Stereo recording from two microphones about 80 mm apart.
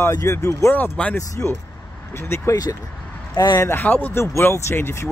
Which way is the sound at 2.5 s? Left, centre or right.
Left.